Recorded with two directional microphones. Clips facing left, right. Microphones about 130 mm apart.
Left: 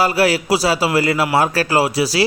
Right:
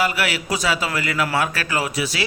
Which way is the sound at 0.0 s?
35° left (ahead or behind).